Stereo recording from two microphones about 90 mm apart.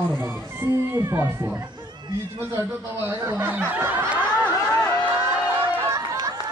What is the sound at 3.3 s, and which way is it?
Snicker, 20° right (ahead or behind).